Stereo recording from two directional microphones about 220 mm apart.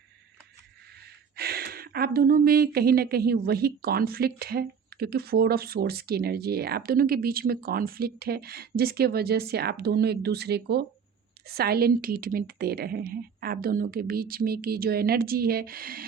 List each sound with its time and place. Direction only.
1.4 s speech: 45° right (ahead or behind)